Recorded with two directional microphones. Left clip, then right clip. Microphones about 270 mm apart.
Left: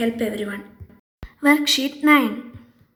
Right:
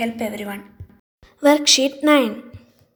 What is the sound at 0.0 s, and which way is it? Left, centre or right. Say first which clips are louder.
A woman's voice: left 1 dB; centre.